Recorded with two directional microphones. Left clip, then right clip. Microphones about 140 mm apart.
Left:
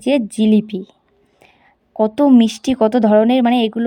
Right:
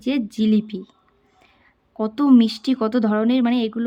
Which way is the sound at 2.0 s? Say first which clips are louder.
Left 5 dB; 40° left (ahead or behind).